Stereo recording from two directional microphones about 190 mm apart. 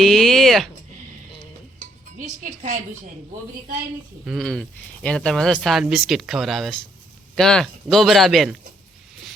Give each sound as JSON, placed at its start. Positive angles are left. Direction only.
{"t": 0.0, "sound": "speech", "side_deg": 0}
{"t": 2.1, "sound": "a woman's voice", "side_deg": -45}
{"t": 4.3, "sound": "speech", "side_deg": 0}